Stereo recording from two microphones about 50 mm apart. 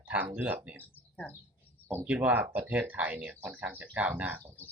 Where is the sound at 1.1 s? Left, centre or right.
Left.